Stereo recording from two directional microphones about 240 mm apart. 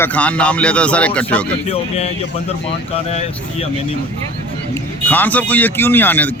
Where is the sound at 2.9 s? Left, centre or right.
Left.